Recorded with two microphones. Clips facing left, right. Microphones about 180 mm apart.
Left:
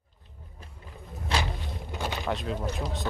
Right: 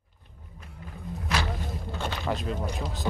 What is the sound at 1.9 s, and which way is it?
Vehicle, 15° left (ahead or behind).